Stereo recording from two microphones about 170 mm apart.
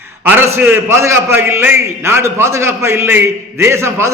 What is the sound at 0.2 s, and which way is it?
A man's voice, 15° right (ahead or behind).